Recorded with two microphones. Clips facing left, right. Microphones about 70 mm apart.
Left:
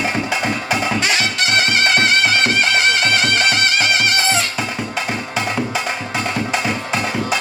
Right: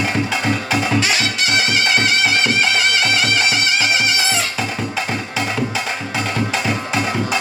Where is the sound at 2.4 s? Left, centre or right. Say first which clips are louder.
Left 1 dB; left.